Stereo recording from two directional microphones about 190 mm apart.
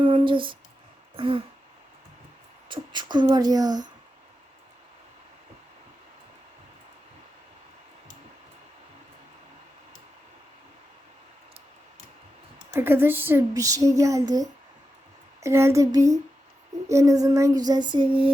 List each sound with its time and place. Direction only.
0.0 s a sound: 25° right (ahead or behind)
1.1 s throat clearing: 25° right (ahead or behind)
2.6 s female singing: 25° right (ahead or behind)
12.7 s speech: 10° right (ahead or behind)
15.4 s speech: 15° right (ahead or behind)
16.9 s female singing: 15° right (ahead or behind)